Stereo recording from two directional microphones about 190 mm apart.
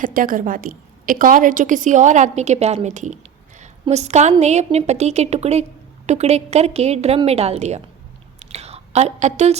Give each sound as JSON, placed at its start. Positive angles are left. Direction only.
{"t": 0.0, "sound": "a woman's voice", "side_deg": -45}
{"t": 8.4, "sound": "whispering", "side_deg": -35}